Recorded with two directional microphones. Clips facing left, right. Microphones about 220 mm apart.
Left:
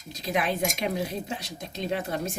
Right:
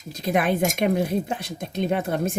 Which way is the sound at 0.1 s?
55° right (ahead or behind).